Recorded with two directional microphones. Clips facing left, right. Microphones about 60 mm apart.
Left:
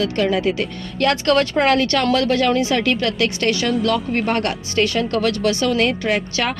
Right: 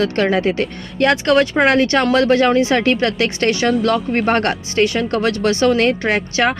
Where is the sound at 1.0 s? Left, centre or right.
Right.